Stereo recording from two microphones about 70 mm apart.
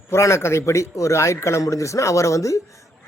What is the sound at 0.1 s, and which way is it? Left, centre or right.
A man's voice, left.